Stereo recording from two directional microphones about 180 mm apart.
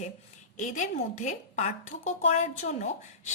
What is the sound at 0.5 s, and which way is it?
A woman's voice, 40° left (ahead or behind).